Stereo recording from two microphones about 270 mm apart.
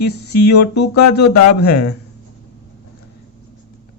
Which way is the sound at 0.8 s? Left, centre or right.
Left.